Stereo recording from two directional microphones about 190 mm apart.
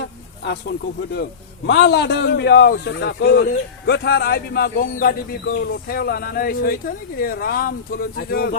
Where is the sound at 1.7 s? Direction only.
65° left (ahead or behind).